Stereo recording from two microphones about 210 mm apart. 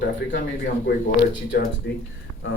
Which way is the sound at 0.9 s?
40° left (ahead or behind).